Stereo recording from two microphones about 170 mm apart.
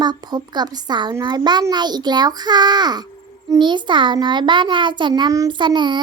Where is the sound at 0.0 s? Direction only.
25° right (ahead or behind).